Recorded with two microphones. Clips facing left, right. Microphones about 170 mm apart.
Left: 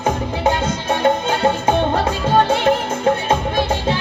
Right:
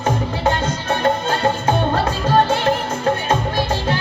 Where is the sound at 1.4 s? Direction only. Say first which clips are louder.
Left 2 dB; 20° left (ahead or behind).